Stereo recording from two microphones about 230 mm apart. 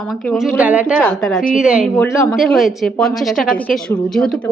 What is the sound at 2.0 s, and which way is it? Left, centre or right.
Speech, centre.